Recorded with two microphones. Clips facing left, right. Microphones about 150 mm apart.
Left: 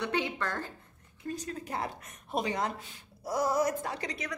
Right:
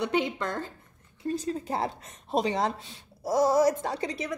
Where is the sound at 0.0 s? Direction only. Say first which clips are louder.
Right 4 dB; 20° right (ahead or behind).